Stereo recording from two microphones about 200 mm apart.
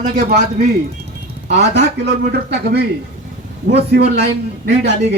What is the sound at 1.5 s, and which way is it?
A man's voice, 55° right (ahead or behind).